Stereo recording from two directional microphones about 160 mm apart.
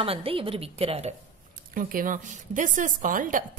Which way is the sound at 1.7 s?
60° right (ahead or behind).